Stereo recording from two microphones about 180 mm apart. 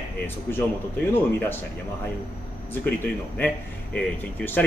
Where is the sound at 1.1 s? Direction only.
10° left (ahead or behind).